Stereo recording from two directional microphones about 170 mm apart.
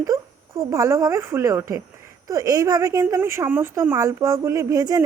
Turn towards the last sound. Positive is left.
turn(degrees=-20)  # may be behind; listen again after turning